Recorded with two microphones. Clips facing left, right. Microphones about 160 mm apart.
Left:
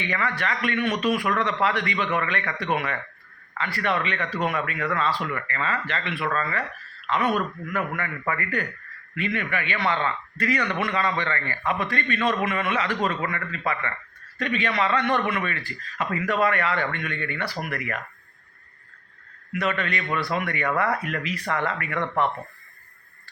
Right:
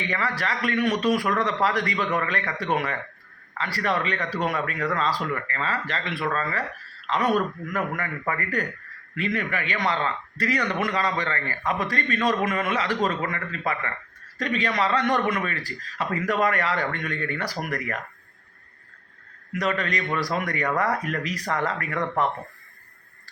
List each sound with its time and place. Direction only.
0.1 s a man's voice: 35° right (ahead or behind)
19.5 s a man's voice: 35° right (ahead or behind)